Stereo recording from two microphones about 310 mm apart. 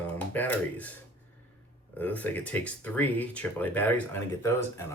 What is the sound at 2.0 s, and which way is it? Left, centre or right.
Speech, centre.